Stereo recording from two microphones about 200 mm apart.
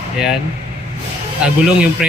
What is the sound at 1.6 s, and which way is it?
Speech, 5° right (ahead or behind).